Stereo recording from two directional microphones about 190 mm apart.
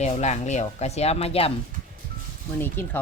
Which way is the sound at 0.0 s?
35° left (ahead or behind).